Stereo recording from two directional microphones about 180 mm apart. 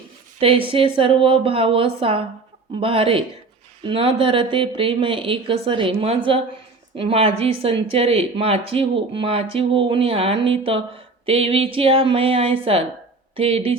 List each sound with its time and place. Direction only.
0.3 s a woman's voice: 30° right (ahead or behind)